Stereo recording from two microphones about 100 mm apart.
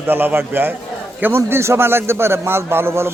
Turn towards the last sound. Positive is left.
turn(degrees=-25)  # may be behind; listen again after turning